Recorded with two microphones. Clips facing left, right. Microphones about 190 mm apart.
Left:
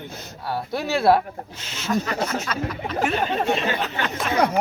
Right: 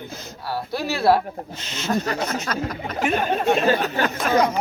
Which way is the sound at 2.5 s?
40° right (ahead or behind).